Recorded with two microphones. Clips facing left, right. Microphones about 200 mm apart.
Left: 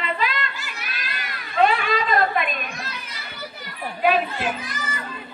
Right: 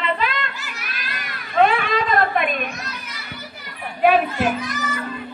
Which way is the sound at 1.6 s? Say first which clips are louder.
Right 1 dB; 55° right (ahead or behind).